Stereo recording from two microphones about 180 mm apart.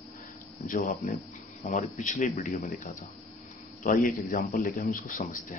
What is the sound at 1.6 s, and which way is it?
Speech, 40° left (ahead or behind).